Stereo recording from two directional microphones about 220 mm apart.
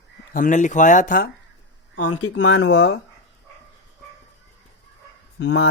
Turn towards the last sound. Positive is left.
turn(degrees=55)  # may be behind; listen again after turning